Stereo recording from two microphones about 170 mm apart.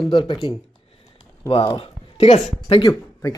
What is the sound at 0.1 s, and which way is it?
Speech, 30° left (ahead or behind).